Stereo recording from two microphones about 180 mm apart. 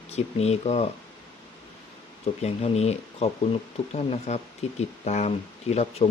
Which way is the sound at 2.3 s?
35° left (ahead or behind).